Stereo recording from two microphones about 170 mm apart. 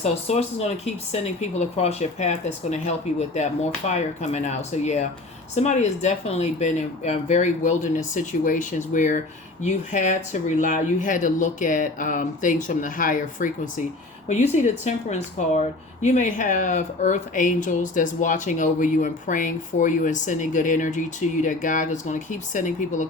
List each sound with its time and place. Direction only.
0.0 s speech: 40° left (ahead or behind)